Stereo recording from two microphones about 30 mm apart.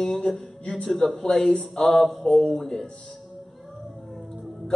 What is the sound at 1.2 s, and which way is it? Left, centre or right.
Speech, left.